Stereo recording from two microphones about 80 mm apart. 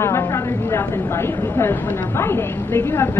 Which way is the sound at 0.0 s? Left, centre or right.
Left.